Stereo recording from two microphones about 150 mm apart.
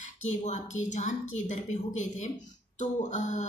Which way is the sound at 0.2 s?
50° left (ahead or behind).